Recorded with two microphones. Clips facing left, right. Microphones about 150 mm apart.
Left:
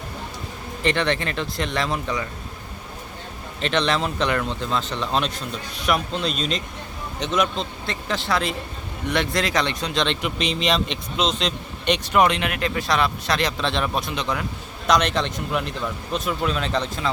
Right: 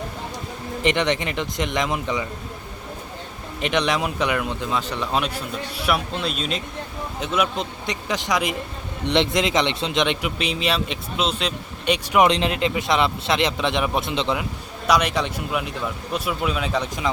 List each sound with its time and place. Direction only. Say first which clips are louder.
0.8 s speech: right 1 dB; 20° right (ahead or behind)
3.6 s speech: even; 15° right (ahead or behind)
12.3 s speech: right 3 dB; 25° right (ahead or behind)
14.8 s speech: even; 10° right (ahead or behind)